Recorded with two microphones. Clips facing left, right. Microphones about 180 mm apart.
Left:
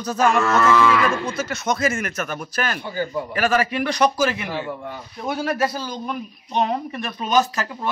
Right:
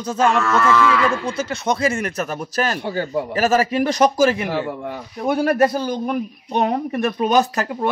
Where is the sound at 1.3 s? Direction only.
30° right (ahead or behind).